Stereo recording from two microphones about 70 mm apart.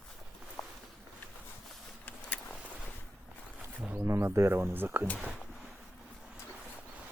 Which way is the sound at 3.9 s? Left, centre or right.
Right.